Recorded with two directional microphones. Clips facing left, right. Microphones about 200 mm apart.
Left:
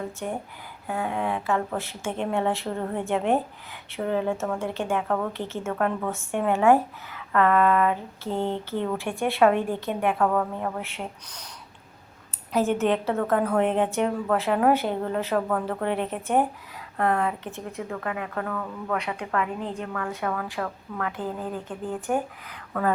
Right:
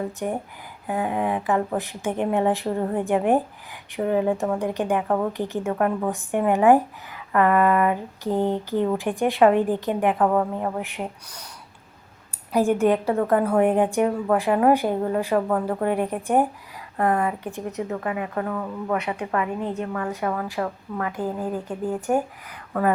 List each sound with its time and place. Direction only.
0.2 s a woman's voice: 10° right (ahead or behind)
12.5 s a woman's voice: 15° right (ahead or behind)